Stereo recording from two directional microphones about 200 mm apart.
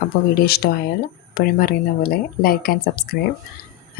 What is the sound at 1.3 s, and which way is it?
Speech, 50° left (ahead or behind).